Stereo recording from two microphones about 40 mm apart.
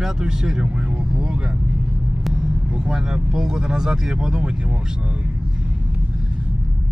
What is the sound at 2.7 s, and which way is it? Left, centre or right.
Speech, centre.